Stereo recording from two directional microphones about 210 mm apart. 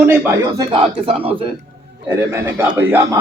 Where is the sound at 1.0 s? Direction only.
25° right (ahead or behind).